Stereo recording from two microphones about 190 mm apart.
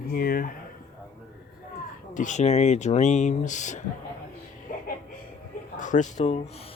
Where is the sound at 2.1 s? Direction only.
40° left (ahead or behind).